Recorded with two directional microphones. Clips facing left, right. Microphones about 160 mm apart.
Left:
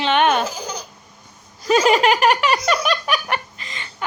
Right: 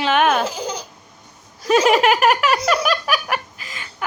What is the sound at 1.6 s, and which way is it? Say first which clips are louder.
A woman's voice: right 1 dB; centre (ahead or behind).